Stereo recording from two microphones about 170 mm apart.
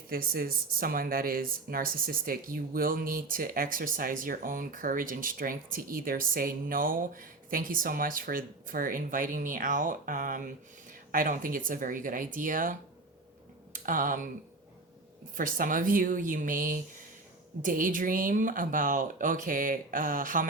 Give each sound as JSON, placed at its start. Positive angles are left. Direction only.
{"t": 0.1, "sound": "speech", "side_deg": -60}
{"t": 13.7, "sound": "speech", "side_deg": -50}
{"t": 15.4, "sound": "speech", "side_deg": -50}